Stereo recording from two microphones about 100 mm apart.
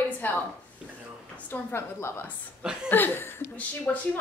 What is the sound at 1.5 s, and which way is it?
A woman's voice, 25° left (ahead or behind).